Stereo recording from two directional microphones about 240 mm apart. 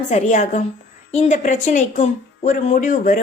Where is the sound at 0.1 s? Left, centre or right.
Left.